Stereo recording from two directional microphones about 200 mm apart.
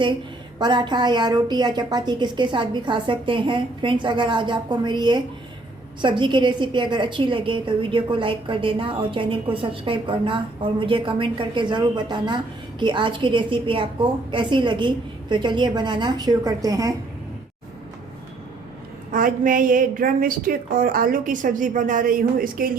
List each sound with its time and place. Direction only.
0.6 s a woman's voice: 20° right (ahead or behind)
19.1 s a woman's voice: 40° right (ahead or behind)